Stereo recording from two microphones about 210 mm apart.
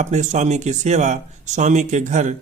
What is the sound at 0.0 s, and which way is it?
Speech, 35° right (ahead or behind).